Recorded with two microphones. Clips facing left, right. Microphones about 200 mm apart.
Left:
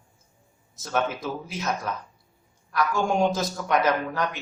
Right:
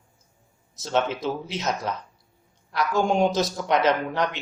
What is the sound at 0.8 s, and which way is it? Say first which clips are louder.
A man's voice: right 3 dB; 25° right (ahead or behind).